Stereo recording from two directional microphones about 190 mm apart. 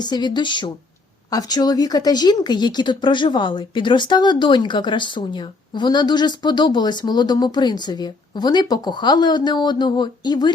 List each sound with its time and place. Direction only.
0.0 s speech: 20° left (ahead or behind)